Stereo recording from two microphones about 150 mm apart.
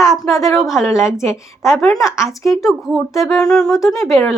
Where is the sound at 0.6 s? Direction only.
Centre (ahead or behind).